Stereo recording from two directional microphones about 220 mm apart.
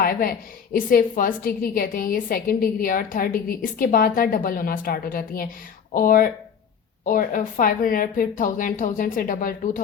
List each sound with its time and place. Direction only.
0.0 s a woman's voice: 40° left (ahead or behind)